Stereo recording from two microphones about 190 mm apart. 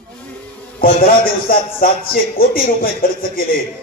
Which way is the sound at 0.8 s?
50° left (ahead or behind).